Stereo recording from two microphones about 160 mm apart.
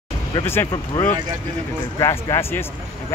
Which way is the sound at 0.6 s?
15° left (ahead or behind).